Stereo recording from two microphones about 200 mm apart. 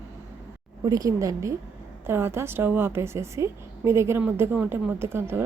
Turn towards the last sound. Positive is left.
turn(degrees=-10)  # may be behind; listen again after turning